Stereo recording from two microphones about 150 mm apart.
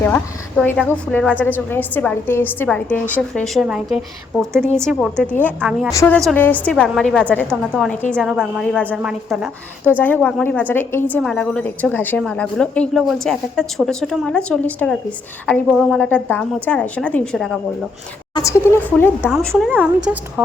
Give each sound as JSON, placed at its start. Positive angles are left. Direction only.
{"t": 0.0, "sound": "a woman's voice", "side_deg": 10}
{"t": 8.6, "sound": "a woman's voice", "side_deg": 10}
{"t": 8.9, "sound": "a woman's voice", "side_deg": -10}
{"t": 10.0, "sound": "a woman's voice", "side_deg": 10}
{"t": 16.0, "sound": "a woman's voice", "side_deg": 10}
{"t": 18.3, "sound": "a woman's voice", "side_deg": 20}
{"t": 19.4, "sound": "a woman's voice", "side_deg": 5}